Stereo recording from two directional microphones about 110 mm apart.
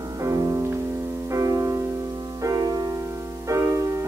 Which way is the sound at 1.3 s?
30° right (ahead or behind).